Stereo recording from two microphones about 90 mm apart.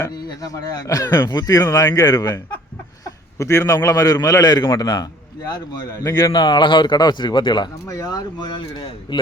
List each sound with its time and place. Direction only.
0.1 s speech: 45° left (ahead or behind)
3.0 s a sound: 35° left (ahead or behind)
3.8 s speech: 40° left (ahead or behind); by 7.7 s 60° left (ahead or behind)
7.9 s speech: 45° left (ahead or behind); by 9.1 s 60° left (ahead or behind)